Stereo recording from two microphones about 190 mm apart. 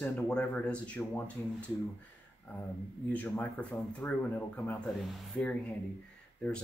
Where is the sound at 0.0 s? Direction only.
5° left (ahead or behind).